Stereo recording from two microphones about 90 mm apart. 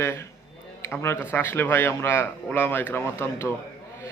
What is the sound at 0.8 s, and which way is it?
A man's voice, 30° left (ahead or behind).